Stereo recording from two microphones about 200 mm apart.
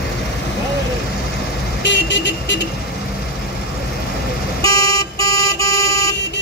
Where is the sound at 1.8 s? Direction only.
65° left (ahead or behind).